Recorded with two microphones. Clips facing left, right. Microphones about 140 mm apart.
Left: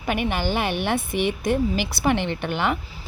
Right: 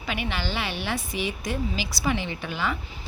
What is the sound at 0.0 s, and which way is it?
A woman's voice, 50° left (ahead or behind).